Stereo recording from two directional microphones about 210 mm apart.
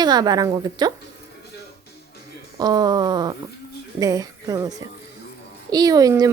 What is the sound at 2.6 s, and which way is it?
A child's voice, 20° right (ahead or behind).